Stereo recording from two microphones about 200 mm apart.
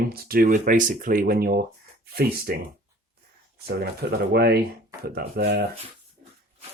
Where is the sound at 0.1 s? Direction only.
50° right (ahead or behind).